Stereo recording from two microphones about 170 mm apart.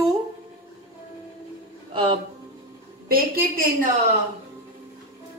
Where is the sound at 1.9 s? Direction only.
30° right (ahead or behind).